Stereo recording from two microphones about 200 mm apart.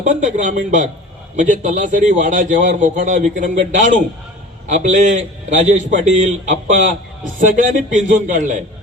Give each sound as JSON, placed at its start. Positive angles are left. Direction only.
{"t": 0.0, "sound": "a man's voice", "side_deg": -40}